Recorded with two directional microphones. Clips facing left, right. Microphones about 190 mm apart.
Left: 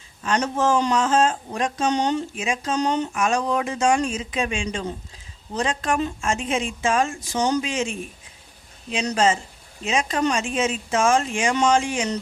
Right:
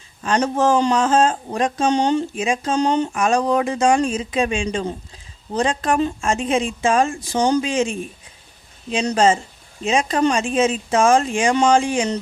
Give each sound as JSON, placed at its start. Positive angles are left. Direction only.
{"t": 0.2, "sound": "speech", "side_deg": -35}